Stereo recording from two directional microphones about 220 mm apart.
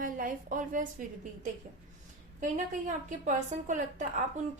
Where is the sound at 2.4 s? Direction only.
35° right (ahead or behind).